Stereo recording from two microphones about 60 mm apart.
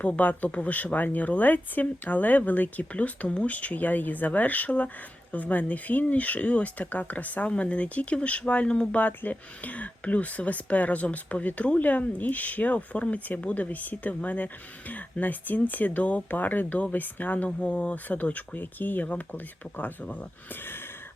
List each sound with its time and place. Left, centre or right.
0.0 s speech: left